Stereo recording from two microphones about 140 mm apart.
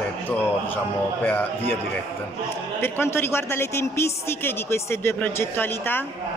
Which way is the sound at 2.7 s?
15° left (ahead or behind).